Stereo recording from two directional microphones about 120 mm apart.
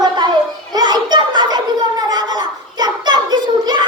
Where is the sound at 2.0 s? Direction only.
35° right (ahead or behind).